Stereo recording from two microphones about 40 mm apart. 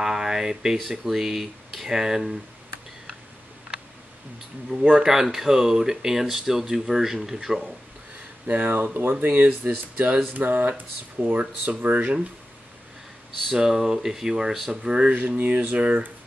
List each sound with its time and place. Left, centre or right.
0.0 s speech: centre
4.9 s speech: centre
8.5 s speech: right
13.5 s speech: centre
15.0 s speech: right